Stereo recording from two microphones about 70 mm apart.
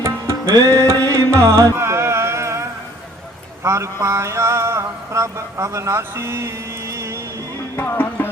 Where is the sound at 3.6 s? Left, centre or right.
Right.